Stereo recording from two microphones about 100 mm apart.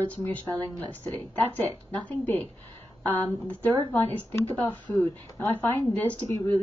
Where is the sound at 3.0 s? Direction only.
20° left (ahead or behind).